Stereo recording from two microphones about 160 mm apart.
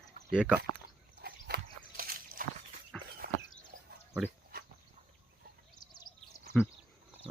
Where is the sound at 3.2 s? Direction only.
75° right (ahead or behind).